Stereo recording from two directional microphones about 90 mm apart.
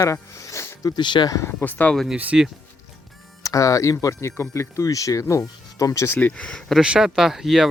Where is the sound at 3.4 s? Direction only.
40° left (ahead or behind).